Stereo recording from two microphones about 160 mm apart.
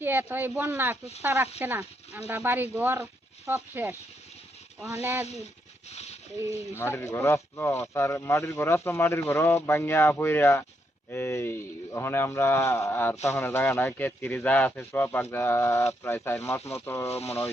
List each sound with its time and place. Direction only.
0.0 s speech: 15° right (ahead or behind)
5.0 s speech: 15° right (ahead or behind)
5.9 s a sound: 45° left (ahead or behind)
6.7 s speech: 15° left (ahead or behind)
17.1 s speech: 40° left (ahead or behind)